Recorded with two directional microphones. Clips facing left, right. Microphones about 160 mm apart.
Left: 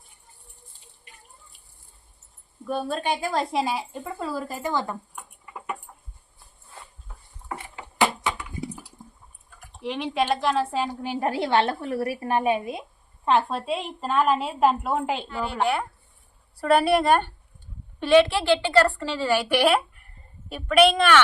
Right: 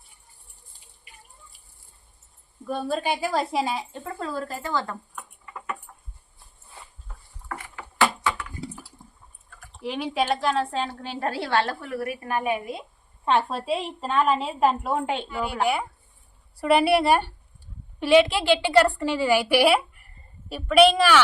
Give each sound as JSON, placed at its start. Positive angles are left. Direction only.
{"t": 2.6, "sound": "speech", "side_deg": 0}
{"t": 7.4, "sound": "a sound", "side_deg": 20}
{"t": 9.8, "sound": "a woman's voice", "side_deg": 0}
{"t": 13.2, "sound": "a woman's voice", "side_deg": 0}